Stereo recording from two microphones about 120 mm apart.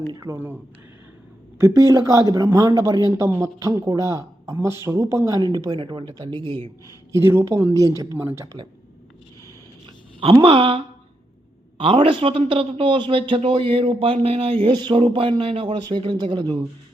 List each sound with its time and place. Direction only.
0.1 s speech: 30° right (ahead or behind)
5.7 s speech: 45° right (ahead or behind)
7.1 s speech: 20° right (ahead or behind)
10.3 s a man's voice: 45° right (ahead or behind)
11.8 s a man's voice: 50° right (ahead or behind)